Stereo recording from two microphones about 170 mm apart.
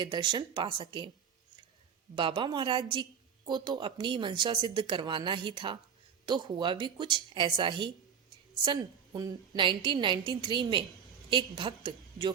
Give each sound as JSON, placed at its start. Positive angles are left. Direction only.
{"t": 0.0, "sound": "a woman's voice", "side_deg": -25}
{"t": 2.1, "sound": "a woman's voice", "side_deg": -30}